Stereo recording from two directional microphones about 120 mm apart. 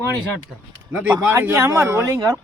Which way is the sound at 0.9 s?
15° right (ahead or behind).